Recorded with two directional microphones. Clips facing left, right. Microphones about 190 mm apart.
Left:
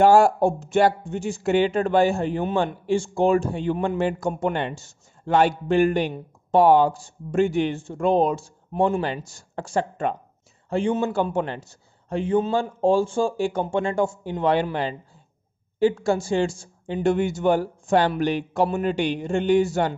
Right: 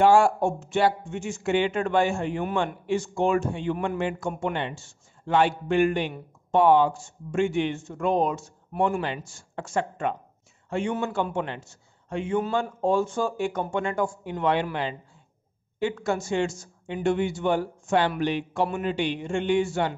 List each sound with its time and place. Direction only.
0.0 s a man's voice: 40° left (ahead or behind)